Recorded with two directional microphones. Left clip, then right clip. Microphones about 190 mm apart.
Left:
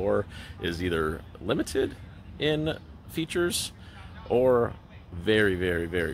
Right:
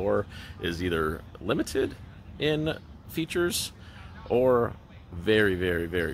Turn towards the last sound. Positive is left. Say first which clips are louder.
# even
turn(degrees=0)  # may be behind; listen again after turning